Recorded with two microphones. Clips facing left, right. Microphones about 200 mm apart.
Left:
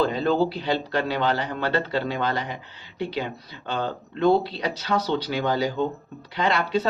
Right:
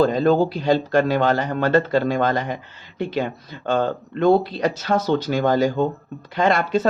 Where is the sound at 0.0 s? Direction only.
45° right (ahead or behind).